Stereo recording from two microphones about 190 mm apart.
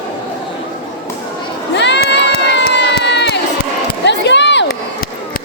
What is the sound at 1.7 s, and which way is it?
Crowd, 65° left (ahead or behind).